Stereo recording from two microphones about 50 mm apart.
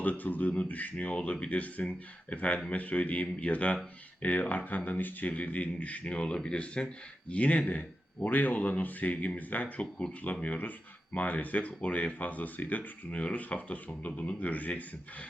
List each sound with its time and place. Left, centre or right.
0.0 s a man's voice: left